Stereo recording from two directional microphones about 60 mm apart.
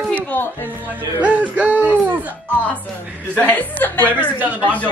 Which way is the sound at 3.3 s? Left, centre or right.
Left.